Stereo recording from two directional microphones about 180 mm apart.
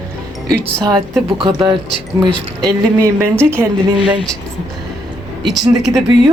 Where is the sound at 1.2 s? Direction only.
30° right (ahead or behind).